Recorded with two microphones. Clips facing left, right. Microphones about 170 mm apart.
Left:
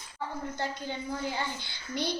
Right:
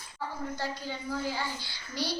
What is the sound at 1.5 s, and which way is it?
Speech, 20° left (ahead or behind).